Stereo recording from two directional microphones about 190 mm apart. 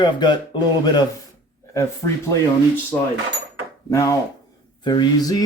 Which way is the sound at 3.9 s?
15° left (ahead or behind).